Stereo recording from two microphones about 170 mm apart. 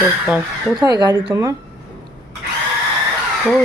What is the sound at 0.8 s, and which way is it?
Speech, 25° right (ahead or behind).